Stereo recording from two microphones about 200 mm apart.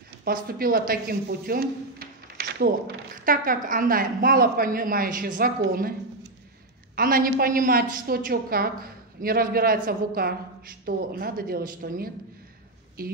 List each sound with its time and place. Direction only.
0.2 s a woman's voice: 50° right (ahead or behind)
7.0 s a woman's voice: 45° right (ahead or behind)